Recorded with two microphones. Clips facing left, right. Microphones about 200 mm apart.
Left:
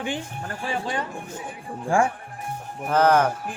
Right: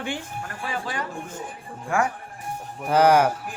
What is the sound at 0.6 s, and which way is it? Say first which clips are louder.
Speech: left 3 dB; 25° left (ahead or behind).